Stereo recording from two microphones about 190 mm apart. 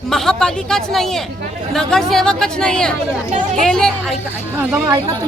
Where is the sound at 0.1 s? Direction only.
Centre (ahead or behind).